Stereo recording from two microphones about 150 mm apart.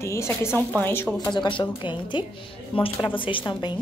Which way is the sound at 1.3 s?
30° left (ahead or behind).